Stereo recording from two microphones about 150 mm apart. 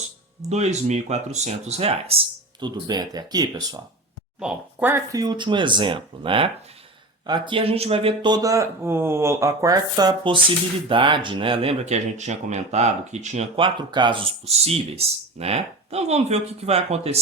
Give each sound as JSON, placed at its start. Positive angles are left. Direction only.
{"t": 0.5, "sound": "speech", "side_deg": -50}
{"t": 4.4, "sound": "speech", "side_deg": -10}
{"t": 8.3, "sound": "speech", "side_deg": -25}
{"t": 13.6, "sound": "speech", "side_deg": -30}